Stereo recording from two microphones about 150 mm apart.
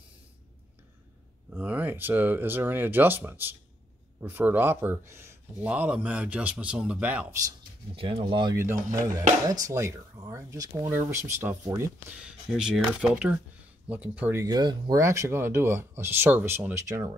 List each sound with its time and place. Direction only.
1.5 s speech: 10° right (ahead or behind)
7.9 s speech: 35° right (ahead or behind)
8.5 s speech: 20° right (ahead or behind)
12.2 s speech: 5° right (ahead or behind)
14.4 s speech: 30° right (ahead or behind)